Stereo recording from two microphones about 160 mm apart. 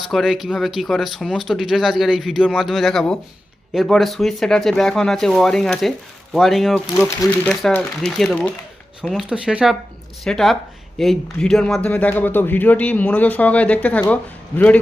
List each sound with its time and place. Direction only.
0.1 s speech: centre (ahead or behind)
6.9 s speech: 15° left (ahead or behind)
7.7 s speech: 5° left (ahead or behind)